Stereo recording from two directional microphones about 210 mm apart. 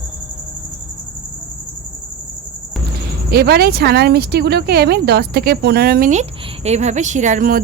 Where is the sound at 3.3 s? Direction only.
50° right (ahead or behind).